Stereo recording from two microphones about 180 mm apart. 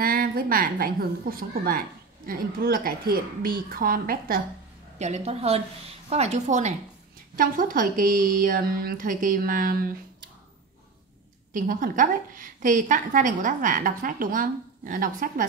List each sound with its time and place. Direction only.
0.0 s a woman's voice: 55° right (ahead or behind)
4.9 s a woman's voice: 40° right (ahead or behind)
11.5 s a woman's voice: 50° right (ahead or behind)